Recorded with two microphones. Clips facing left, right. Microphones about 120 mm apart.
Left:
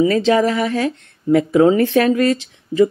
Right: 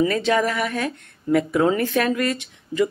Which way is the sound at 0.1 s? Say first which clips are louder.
Left 6 dB; 30° left (ahead or behind).